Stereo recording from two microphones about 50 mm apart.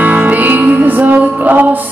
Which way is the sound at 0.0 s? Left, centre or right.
Right.